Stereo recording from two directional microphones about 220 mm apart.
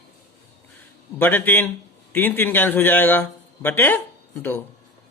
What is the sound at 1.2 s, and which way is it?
A man's voice, 10° left (ahead or behind).